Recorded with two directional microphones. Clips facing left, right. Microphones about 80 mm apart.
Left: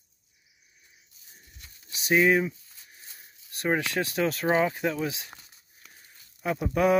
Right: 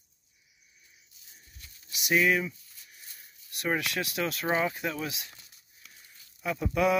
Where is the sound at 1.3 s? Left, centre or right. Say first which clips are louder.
Left 2 dB; left.